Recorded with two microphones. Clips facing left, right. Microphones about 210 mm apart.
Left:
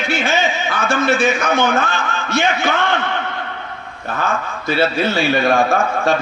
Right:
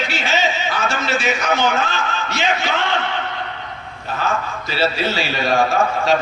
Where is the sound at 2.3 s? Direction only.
55° left (ahead or behind).